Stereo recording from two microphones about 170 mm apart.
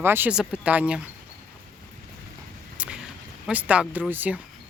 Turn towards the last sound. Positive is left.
turn(degrees=-10)  # may be behind; listen again after turning